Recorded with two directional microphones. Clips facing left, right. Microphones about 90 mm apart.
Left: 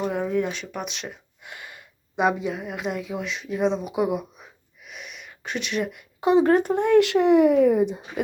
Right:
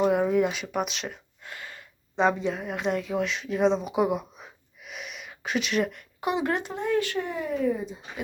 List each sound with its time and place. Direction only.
0.0 s speech: 5° right (ahead or behind)
1.5 s speech: 20° left (ahead or behind); by 4.4 s centre (ahead or behind)
4.9 s a sound: centre (ahead or behind)
6.1 s speech: 30° left (ahead or behind); by 8.2 s 60° left (ahead or behind)